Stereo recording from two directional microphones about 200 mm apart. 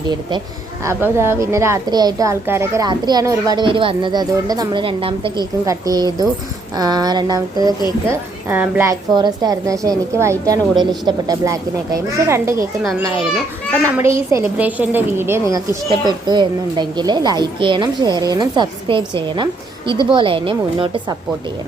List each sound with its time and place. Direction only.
0.1 s a woman's voice: 25° right (ahead or behind)
0.9 s a woman's voice: 10° right (ahead or behind)
8.0 s a woman's voice: 10° right (ahead or behind)
14.1 s a woman's voice: 15° right (ahead or behind)